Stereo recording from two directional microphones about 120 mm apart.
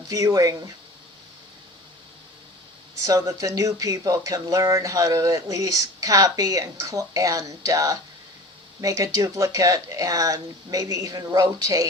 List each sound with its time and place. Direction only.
0.1 s speech: 30° right (ahead or behind)
3.1 s speech: 30° right (ahead or behind)